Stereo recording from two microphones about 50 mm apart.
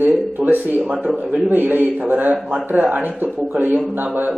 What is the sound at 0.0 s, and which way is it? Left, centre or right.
Speech, right.